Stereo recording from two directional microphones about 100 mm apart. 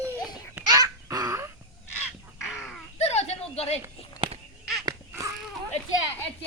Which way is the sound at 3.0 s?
90° left.